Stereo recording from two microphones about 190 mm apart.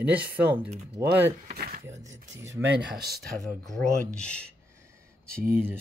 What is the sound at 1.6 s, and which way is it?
Speech, 50° right (ahead or behind).